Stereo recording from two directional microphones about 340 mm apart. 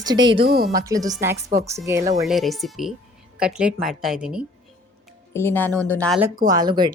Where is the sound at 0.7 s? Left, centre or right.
Centre.